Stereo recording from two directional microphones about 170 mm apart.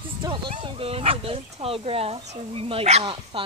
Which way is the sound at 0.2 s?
30° right (ahead or behind).